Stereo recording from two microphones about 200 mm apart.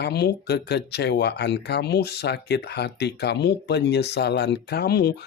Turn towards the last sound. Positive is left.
turn(degrees=50)  # may be behind; listen again after turning